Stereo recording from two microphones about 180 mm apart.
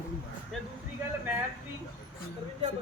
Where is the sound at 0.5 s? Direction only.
Centre (ahead or behind).